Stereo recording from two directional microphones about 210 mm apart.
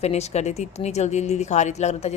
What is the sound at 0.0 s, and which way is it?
Speech, 30° left (ahead or behind).